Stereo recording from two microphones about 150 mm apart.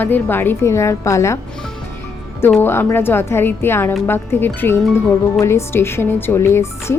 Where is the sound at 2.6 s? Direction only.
15° left (ahead or behind).